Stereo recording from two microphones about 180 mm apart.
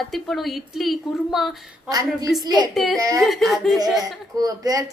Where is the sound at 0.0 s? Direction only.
Centre (ahead or behind).